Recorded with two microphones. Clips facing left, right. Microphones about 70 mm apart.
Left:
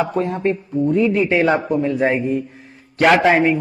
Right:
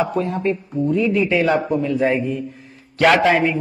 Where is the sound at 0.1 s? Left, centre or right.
Left.